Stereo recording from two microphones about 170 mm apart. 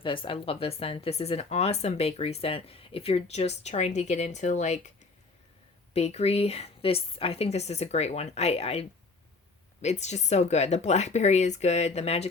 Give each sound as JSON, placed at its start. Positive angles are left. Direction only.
{"t": 0.0, "sound": "speech", "side_deg": 30}
{"t": 5.9, "sound": "speech", "side_deg": 40}